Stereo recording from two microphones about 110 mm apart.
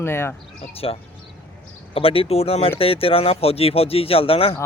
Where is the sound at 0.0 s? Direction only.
20° left (ahead or behind).